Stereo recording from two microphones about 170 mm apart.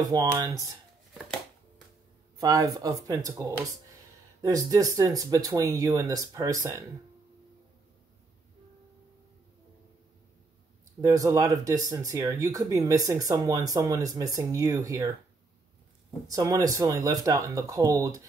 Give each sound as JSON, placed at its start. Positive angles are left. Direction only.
{"t": 0.0, "sound": "speech", "side_deg": -20}
{"t": 2.3, "sound": "speech", "side_deg": -20}
{"t": 11.0, "sound": "speech", "side_deg": -20}
{"t": 16.3, "sound": "speech", "side_deg": -20}